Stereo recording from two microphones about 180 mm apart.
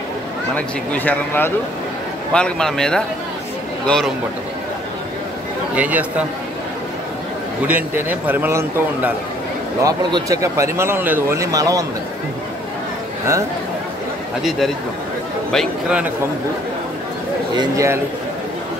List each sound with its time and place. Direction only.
0.6 s a man's voice: 10° left (ahead or behind)
5.8 s speech: 10° right (ahead or behind)
7.6 s speech: 10° right (ahead or behind)
15.5 s a man's voice: centre (ahead or behind)
17.6 s speech: 15° right (ahead or behind)